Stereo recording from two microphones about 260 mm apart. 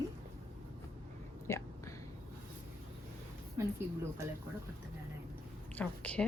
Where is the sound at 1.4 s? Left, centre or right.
Centre.